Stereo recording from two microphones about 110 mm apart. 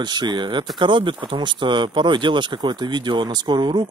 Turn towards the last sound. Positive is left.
turn(degrees=-40)  # may be behind; listen again after turning